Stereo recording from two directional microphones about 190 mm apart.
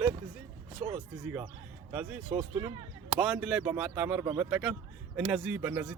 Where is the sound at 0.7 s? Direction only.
25° right (ahead or behind).